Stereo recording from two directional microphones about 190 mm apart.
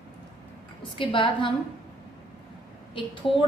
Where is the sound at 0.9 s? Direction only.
25° left (ahead or behind).